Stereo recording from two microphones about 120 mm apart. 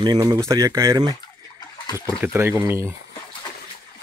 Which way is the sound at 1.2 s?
35° left (ahead or behind).